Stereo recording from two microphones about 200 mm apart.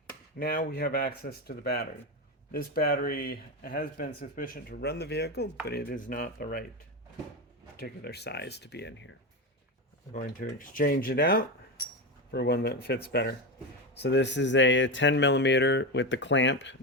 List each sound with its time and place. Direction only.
0.3 s speech: 45° left (ahead or behind)
7.8 s speech: 55° left (ahead or behind)
10.1 s speech: 40° left (ahead or behind); by 16.7 s 65° left (ahead or behind)